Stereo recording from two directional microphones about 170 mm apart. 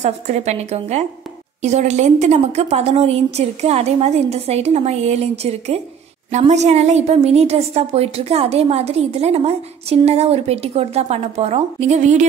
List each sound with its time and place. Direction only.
0.0 s a woman's voice: 40° right (ahead or behind)